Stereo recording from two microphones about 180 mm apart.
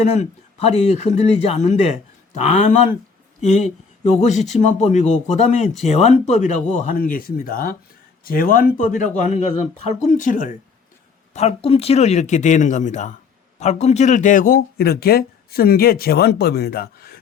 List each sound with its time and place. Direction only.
0.0 s speech: 40° left (ahead or behind)
11.3 s speech: 35° left (ahead or behind); by 17.2 s 55° left (ahead or behind)